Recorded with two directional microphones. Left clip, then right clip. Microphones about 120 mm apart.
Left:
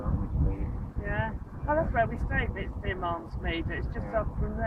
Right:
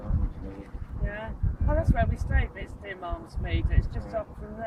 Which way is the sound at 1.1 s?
55° right (ahead or behind).